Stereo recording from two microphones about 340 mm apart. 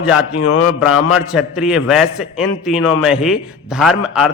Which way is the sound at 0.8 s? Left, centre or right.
Centre.